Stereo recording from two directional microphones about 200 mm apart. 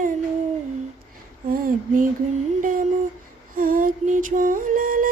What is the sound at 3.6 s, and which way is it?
Music, 45° right (ahead or behind).